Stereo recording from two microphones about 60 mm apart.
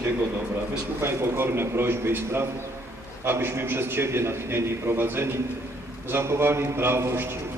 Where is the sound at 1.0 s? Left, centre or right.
Right.